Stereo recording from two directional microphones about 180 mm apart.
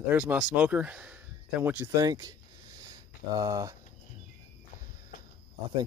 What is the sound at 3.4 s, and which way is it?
Speech, 20° right (ahead or behind).